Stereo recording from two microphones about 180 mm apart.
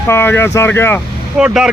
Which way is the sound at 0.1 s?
15° left (ahead or behind).